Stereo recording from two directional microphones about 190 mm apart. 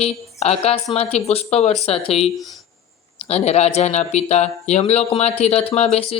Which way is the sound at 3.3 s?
35° left (ahead or behind).